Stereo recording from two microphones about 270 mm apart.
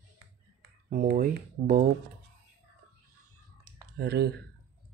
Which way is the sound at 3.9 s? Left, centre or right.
Right.